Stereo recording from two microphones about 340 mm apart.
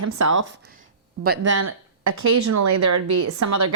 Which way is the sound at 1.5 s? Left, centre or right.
Right.